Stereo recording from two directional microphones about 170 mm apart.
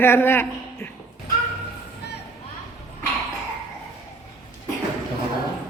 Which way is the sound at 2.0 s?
75° left (ahead or behind).